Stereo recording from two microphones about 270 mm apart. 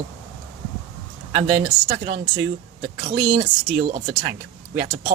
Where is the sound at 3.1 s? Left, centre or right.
Right.